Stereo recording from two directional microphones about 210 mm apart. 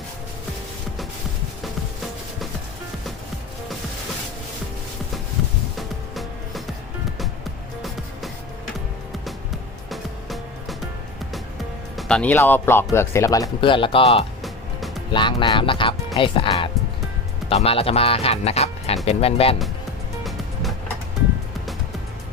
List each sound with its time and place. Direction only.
9.9 s music: centre (ahead or behind)
11.9 s speech: 5° left (ahead or behind); by 14.3 s 25° left (ahead or behind)
14.4 s music: centre (ahead or behind)
15.1 s speech: 20° left (ahead or behind)
20.2 s music: centre (ahead or behind)